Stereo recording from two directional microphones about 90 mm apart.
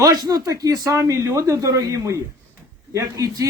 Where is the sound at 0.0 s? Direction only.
45° right (ahead or behind).